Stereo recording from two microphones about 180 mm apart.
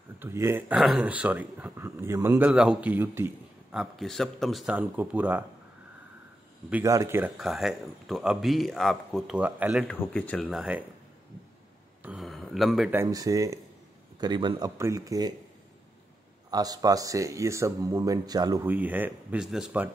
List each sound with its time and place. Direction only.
0.2 s speech: 15° right (ahead or behind)
6.7 s speech: 15° right (ahead or behind)
9.8 s speech: 10° left (ahead or behind); by 10.9 s 5° right (ahead or behind)
12.0 s speech: 5° right (ahead or behind); by 15.3 s 20° right (ahead or behind)
16.4 s speech: 20° right (ahead or behind)
18.7 s speech: 10° right (ahead or behind)